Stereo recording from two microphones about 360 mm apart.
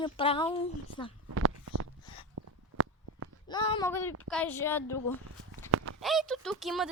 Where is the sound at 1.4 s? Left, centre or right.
Right.